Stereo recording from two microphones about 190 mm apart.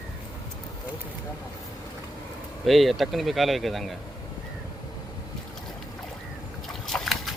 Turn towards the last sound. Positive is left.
turn(degrees=0)  # may be behind; listen again after turning